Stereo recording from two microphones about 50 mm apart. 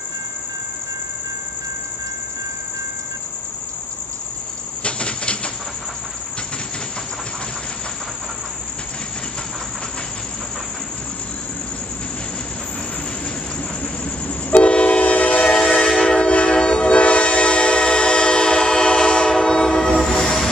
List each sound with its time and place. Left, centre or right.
4.8 s a sound: left
14.2 s train: left
15.5 s train: centre